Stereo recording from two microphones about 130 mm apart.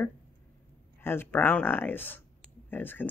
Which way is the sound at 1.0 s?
15° left (ahead or behind).